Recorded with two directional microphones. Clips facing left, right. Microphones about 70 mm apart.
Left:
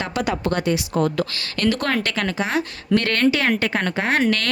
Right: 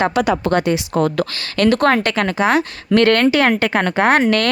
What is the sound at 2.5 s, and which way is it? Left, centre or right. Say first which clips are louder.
A woman's voice: right 5 dB; right.